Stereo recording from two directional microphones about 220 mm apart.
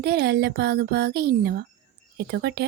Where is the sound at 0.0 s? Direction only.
50° right (ahead or behind).